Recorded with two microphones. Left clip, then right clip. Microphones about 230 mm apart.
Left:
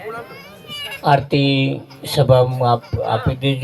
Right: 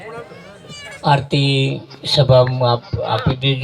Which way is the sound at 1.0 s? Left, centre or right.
Left.